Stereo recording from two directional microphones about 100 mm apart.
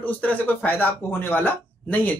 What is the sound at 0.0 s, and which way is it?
Speech, 15° left (ahead or behind).